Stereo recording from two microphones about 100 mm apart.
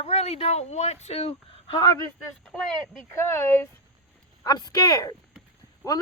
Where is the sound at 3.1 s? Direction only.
25° left (ahead or behind).